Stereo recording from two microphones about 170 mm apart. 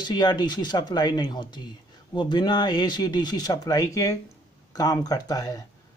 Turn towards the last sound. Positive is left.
turn(degrees=20)  # may be behind; listen again after turning